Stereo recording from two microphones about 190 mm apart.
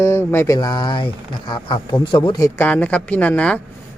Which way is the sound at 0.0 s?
15° left (ahead or behind).